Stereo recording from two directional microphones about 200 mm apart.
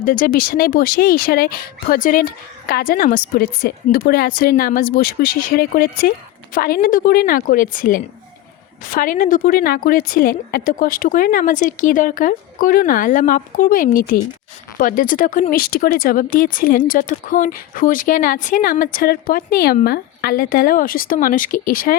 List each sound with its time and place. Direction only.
0.0 s speech: 45° left (ahead or behind)